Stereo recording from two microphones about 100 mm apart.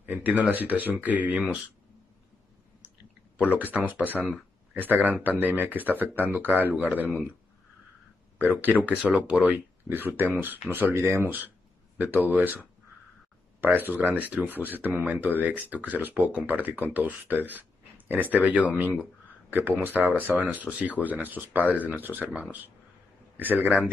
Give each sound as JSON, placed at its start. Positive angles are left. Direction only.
{"t": 0.0, "sound": "speech", "side_deg": -15}
{"t": 3.3, "sound": "speech", "side_deg": -15}
{"t": 8.6, "sound": "speech", "side_deg": -15}
{"t": 13.6, "sound": "speech", "side_deg": -20}